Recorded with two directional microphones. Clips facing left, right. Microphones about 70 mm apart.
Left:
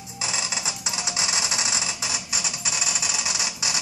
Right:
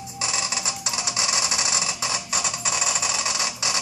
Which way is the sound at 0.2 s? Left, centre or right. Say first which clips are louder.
Right 1 dB; centre.